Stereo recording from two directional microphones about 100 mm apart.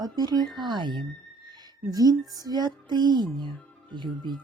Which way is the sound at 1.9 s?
40° right (ahead or behind).